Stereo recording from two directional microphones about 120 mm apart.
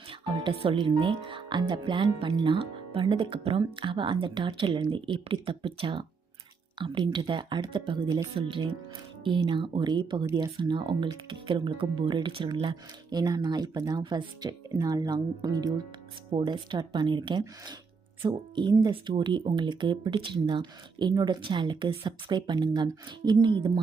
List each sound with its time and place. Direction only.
0.1 s speech: 50° right (ahead or behind)
18.7 s speech: 25° right (ahead or behind)
19.0 s speech: 40° right (ahead or behind)